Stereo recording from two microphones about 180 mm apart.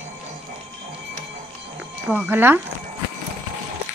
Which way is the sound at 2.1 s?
10° right (ahead or behind).